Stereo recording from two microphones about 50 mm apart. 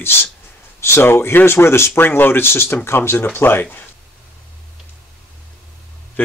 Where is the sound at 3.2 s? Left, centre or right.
Left.